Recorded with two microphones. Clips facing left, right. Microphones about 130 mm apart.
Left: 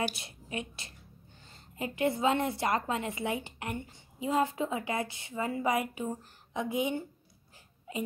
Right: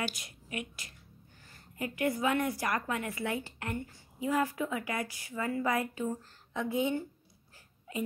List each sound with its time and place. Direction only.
0.1 s a woman's voice: 30° left (ahead or behind)